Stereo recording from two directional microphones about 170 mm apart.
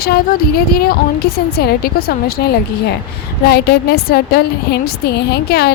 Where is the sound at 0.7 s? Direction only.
60° left (ahead or behind).